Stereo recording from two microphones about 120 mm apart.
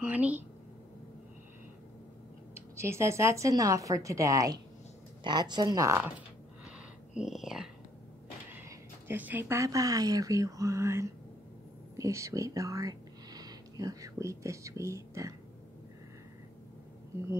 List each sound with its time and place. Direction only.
0.0 s a sound: 10° right (ahead or behind)
2.5 s speech: 20° right (ahead or behind)
5.2 s speech: 35° right (ahead or behind)
5.9 s speech: 20° right (ahead or behind)
7.2 s a sound: 5° right (ahead or behind)
8.6 s speech: 15° right (ahead or behind)